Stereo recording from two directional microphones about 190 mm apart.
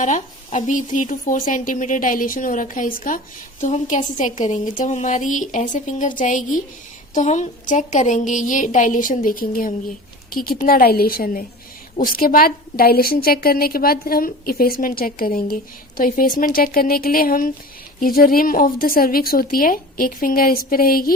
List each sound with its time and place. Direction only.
0.0 s a woman's voice: 40° left (ahead or behind)